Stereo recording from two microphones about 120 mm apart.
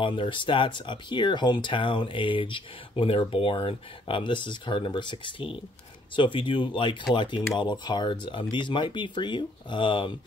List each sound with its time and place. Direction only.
0.0 s speech: 45° left (ahead or behind)